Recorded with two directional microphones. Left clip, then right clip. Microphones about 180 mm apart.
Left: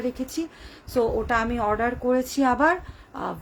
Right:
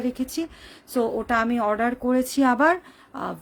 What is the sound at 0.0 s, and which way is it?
A woman's voice, 45° right (ahead or behind).